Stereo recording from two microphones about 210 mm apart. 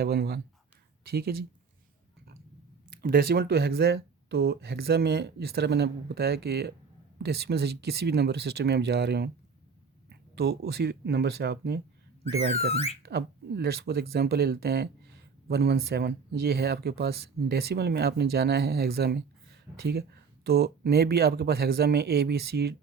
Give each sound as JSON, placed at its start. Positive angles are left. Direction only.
{"t": 0.0, "sound": "speech", "side_deg": -50}
{"t": 3.0, "sound": "speech", "side_deg": -45}
{"t": 12.7, "sound": "speech", "side_deg": 30}
{"t": 13.0, "sound": "speech", "side_deg": -50}